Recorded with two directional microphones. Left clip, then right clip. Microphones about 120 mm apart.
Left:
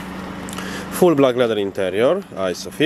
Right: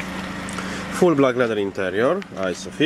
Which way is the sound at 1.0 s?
15° left (ahead or behind).